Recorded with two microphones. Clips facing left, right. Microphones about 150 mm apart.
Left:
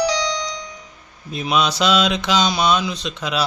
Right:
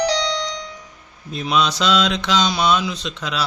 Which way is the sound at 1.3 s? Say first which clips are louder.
Even; 5° left (ahead or behind).